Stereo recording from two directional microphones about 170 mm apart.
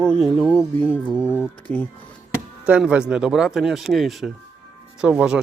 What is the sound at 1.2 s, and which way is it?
Music, 10° left (ahead or behind).